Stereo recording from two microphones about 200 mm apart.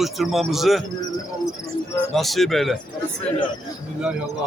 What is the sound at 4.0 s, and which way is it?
Speech, 5° right (ahead or behind).